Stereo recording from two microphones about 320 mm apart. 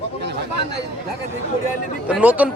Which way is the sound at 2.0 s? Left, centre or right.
Centre.